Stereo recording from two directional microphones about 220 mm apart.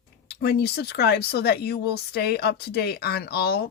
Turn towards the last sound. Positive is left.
turn(degrees=45)  # may be behind; listen again after turning